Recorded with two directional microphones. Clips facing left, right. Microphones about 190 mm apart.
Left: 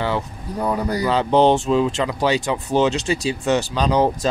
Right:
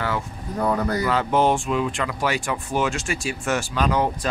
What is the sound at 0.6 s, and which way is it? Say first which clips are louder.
Speech: left 1 dB; 15° left (ahead or behind).